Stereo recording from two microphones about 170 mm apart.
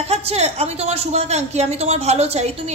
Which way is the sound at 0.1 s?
35° right (ahead or behind).